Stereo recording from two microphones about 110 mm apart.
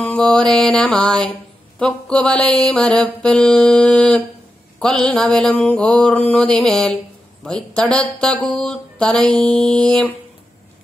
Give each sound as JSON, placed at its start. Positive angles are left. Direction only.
{"t": 0.0, "sound": "mantra", "side_deg": 10}
{"t": 1.8, "sound": "speech", "side_deg": 5}